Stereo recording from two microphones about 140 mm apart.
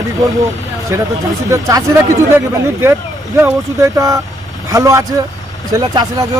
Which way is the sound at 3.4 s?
20° right (ahead or behind).